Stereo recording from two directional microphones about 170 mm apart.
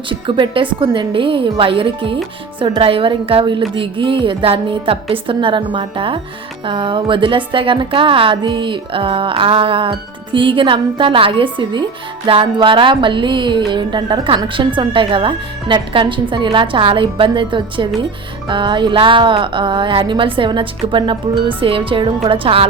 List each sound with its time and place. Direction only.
0.1 s a woman's voice: 30° right (ahead or behind)